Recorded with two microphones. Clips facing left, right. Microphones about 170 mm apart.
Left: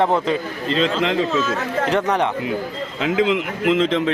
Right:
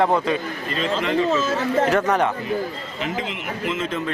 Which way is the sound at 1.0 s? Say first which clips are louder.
Left 1 dB; 90° left.